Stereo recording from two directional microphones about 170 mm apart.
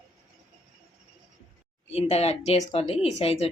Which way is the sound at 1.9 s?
40° left (ahead or behind).